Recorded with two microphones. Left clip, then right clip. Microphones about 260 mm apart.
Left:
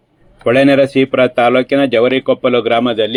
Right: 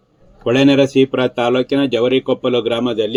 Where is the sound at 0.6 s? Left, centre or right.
Centre.